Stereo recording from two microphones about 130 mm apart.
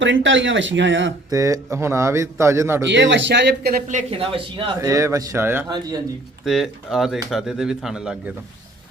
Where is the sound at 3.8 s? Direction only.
75° right (ahead or behind).